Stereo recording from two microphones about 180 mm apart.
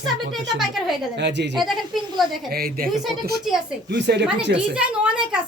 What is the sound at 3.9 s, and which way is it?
Speech, 70° right (ahead or behind).